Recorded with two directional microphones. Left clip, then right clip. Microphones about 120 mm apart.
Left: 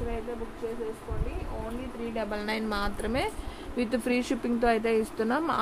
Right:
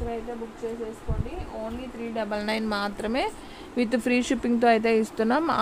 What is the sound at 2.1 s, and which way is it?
A woman's voice, 70° right (ahead or behind).